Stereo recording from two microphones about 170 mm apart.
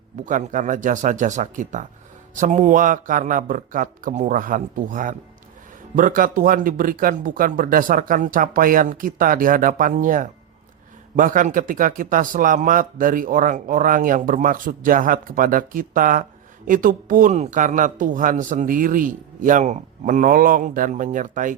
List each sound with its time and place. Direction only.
0.3 s speech: 50° right (ahead or behind)